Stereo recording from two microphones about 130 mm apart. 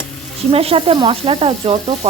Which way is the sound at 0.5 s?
50° right (ahead or behind).